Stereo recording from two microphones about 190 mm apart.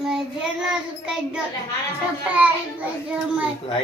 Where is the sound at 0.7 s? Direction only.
5° right (ahead or behind).